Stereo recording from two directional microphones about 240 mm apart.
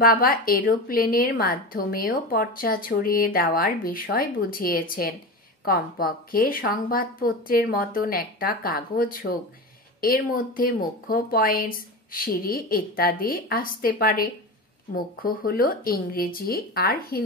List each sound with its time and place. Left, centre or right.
0.0 s a woman's voice: left